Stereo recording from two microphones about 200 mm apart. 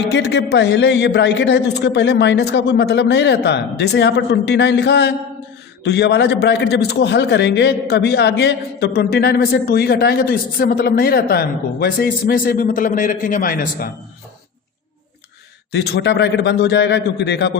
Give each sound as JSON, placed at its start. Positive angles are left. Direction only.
{"t": 0.1, "sound": "a man's voice", "side_deg": 55}
{"t": 15.7, "sound": "a man's voice", "side_deg": 55}